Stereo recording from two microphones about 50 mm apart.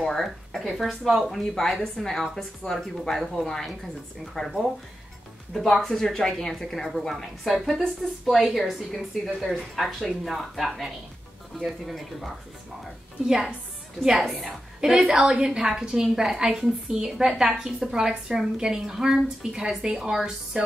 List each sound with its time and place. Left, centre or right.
0.0 s a woman's voice: centre
5.7 s a woman's voice: centre
13.3 s a woman's voice: centre